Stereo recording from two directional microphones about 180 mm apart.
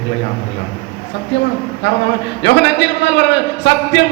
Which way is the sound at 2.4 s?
70° left (ahead or behind).